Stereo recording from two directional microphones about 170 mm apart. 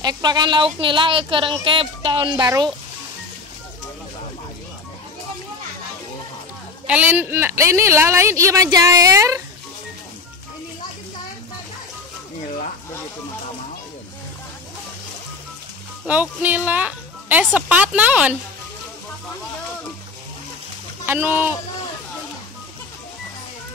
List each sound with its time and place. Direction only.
0.0 s speech: 25° right (ahead or behind)
6.9 s a woman's voice: 10° right (ahead or behind)
16.1 s a woman's voice: 10° right (ahead or behind)
21.0 s speech: 10° right (ahead or behind)